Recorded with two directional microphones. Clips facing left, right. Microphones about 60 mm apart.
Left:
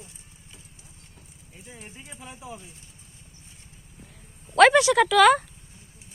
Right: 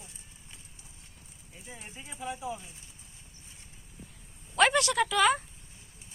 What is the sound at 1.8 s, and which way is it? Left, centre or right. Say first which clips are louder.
Speech: right 3 dB; centre.